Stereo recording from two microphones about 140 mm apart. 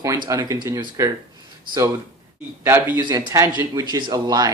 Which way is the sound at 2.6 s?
15° right (ahead or behind).